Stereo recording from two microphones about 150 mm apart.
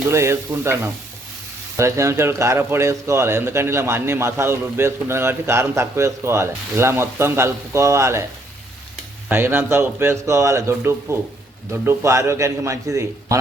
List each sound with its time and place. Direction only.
0.1 s speech: 20° right (ahead or behind)
9.3 s a man's voice: 15° right (ahead or behind)